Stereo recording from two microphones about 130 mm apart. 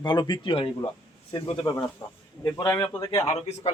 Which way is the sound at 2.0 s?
20° left (ahead or behind).